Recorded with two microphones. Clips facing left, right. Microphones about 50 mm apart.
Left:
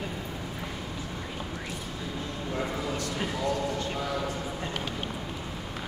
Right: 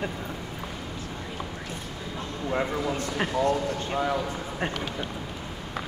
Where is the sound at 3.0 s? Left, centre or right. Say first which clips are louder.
Right 5 dB; right.